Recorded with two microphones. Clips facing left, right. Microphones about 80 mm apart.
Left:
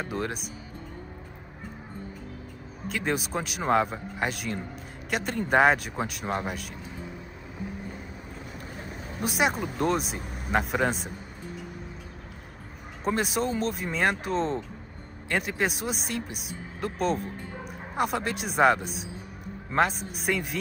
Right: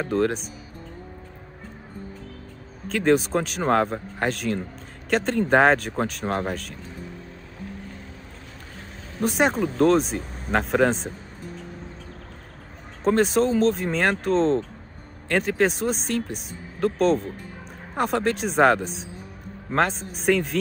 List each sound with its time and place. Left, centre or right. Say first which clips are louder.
0.1 s speech: right 12 dB; centre
2.9 s speech: right 9 dB; centre
8.5 s speech: left 3 dB; centre
13.0 s speech: right 7 dB; centre